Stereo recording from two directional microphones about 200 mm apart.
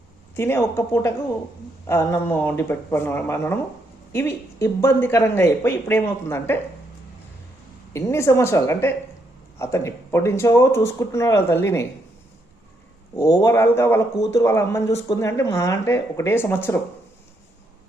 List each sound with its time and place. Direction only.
0.3 s speech: 10° left (ahead or behind)
7.9 s speech: 15° left (ahead or behind)
13.1 s speech: 15° left (ahead or behind)